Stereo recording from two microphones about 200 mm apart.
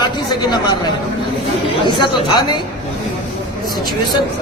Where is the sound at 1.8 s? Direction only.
20° left (ahead or behind).